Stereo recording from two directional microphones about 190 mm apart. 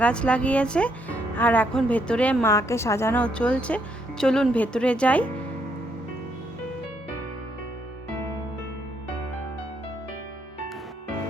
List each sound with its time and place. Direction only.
0.0 s speech: 5° left (ahead or behind)